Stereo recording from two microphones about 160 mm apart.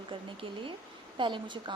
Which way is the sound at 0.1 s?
30° right (ahead or behind).